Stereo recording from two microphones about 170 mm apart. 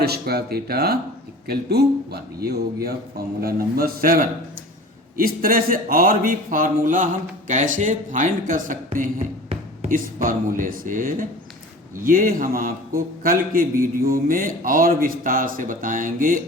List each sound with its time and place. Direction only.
0.0 s a man's voice: 70° right (ahead or behind); by 16.4 s 50° right (ahead or behind)